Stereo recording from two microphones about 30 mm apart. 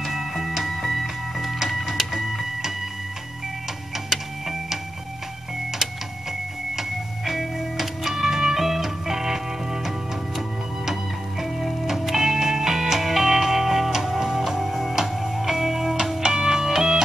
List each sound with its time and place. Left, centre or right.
0.0 s music: centre
1.0 s music: centre
1.7 s printer: centre
3.9 s a sound: centre
5.8 s printer: centre
6.7 s music: centre
16.3 s music: centre